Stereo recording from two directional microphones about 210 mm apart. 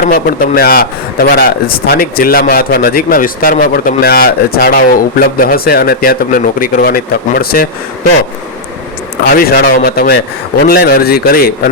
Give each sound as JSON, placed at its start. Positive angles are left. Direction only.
{"t": 0.0, "sound": "a man's voice", "side_deg": 40}
{"t": 9.3, "sound": "a man's voice", "side_deg": 45}